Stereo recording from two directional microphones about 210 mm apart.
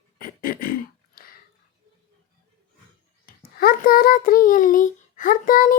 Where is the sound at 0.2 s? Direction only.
45° left (ahead or behind).